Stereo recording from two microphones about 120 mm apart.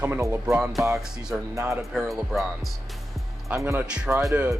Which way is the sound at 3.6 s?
20° right (ahead or behind).